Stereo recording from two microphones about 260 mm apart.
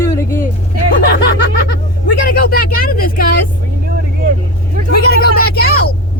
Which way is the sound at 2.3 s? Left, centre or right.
Left.